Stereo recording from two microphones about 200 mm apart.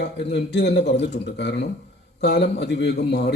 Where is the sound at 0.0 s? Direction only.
60° left (ahead or behind).